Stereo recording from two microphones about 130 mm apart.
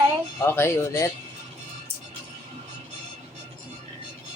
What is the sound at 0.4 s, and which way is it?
Speech, 20° left (ahead or behind).